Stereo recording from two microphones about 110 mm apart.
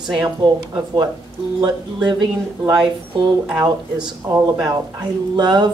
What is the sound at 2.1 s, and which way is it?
Speech, 40° right (ahead or behind).